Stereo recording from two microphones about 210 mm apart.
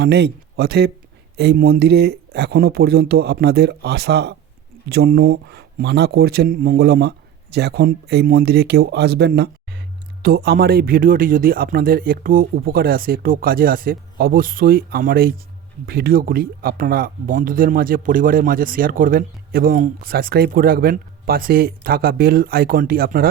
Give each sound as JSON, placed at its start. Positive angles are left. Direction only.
{"t": 0.0, "sound": "speech", "side_deg": -50}